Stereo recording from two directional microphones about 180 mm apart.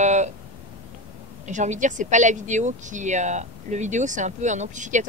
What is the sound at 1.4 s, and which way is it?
Speech, 40° right (ahead or behind).